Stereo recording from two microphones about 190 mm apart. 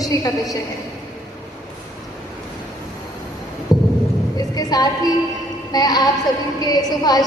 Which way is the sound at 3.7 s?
20° left (ahead or behind).